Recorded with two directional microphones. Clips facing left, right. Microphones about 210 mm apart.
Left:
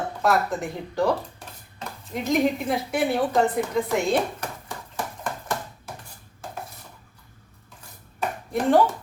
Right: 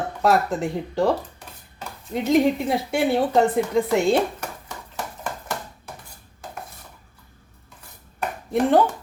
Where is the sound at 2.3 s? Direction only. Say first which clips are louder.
Right 3 dB; 25° right (ahead or behind).